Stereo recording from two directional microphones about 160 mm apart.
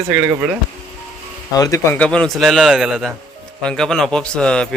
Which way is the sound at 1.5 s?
20° left (ahead or behind).